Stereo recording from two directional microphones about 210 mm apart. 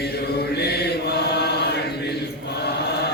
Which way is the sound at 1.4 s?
50° left (ahead or behind).